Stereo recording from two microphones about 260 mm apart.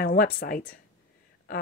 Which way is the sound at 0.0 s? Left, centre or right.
Left.